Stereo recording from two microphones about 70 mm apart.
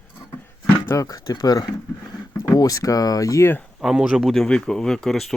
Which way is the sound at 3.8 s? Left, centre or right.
Centre.